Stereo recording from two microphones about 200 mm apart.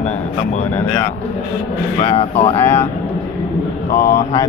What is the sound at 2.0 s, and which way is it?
Speech, 30° left (ahead or behind).